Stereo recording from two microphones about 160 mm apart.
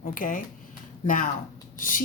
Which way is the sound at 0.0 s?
60° left (ahead or behind).